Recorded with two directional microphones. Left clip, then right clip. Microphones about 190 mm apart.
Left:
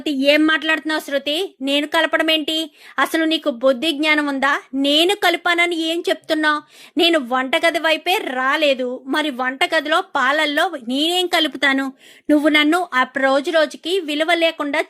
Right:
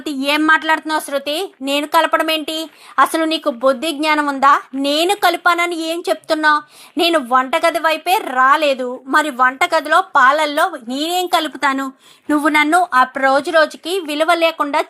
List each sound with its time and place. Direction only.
0.0 s a woman's voice: 20° left (ahead or behind)